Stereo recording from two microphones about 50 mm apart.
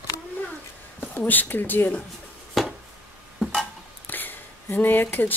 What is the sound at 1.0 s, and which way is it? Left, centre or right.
Speech, left.